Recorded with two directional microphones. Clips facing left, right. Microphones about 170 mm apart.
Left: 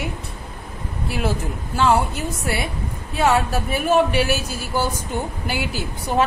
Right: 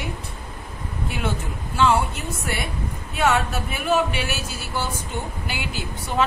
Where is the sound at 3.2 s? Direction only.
35° left (ahead or behind).